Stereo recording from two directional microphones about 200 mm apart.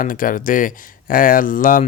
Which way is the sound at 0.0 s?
45° left (ahead or behind).